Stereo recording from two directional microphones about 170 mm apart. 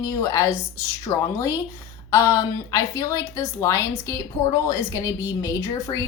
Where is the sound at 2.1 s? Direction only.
20° left (ahead or behind).